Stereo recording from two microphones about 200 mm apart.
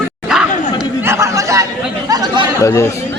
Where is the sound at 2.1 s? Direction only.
20° right (ahead or behind).